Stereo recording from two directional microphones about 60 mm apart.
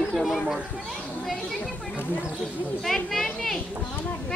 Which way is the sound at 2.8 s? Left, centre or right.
Centre.